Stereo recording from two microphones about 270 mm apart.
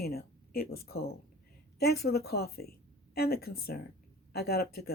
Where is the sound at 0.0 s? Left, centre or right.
Left.